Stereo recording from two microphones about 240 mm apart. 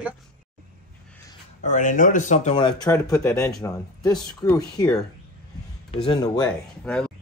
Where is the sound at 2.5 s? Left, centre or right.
Centre.